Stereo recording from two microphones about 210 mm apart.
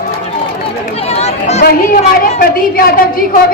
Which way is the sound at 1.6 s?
45° left (ahead or behind).